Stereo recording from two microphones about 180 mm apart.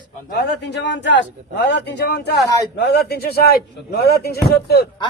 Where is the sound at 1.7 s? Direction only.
75° left (ahead or behind).